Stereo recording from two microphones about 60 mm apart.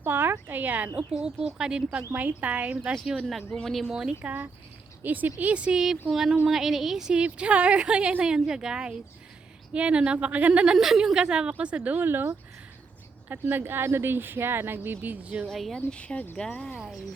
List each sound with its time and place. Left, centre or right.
0.0 s a woman's voice: right
1.1 s a woman's voice: centre
2.1 s speech: right
3.5 s speech: centre
3.8 s a woman's voice: centre
4.1 s speech: right
6.1 s a woman's voice: centre
7.2 s a woman's voice: centre
10.8 s a woman's voice: centre; by 12.0 s right
12.0 s speech: right
15.4 s a woman's voice: centre
15.7 s speech: centre
16.7 s a woman's voice: centre